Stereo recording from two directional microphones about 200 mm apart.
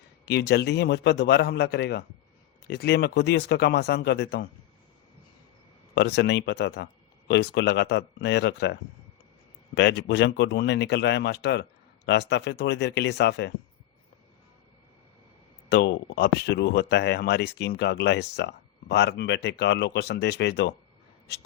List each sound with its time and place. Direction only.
0.3 s speech: 55° left (ahead or behind)
5.9 s speech: 55° left (ahead or behind)
9.7 s speech: 60° left (ahead or behind)
15.7 s speech: 60° left (ahead or behind)